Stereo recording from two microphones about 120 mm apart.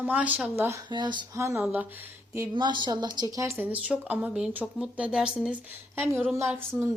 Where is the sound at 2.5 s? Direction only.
40° right (ahead or behind); by 6.2 s 20° right (ahead or behind).